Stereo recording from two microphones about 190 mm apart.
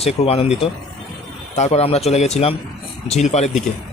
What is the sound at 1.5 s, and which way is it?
Speech, 35° left (ahead or behind).